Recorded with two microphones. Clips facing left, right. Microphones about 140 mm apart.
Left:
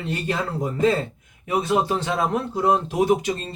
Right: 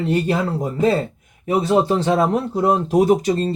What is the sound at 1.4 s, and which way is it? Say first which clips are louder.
Speech: right 5 dB; 30° right (ahead or behind).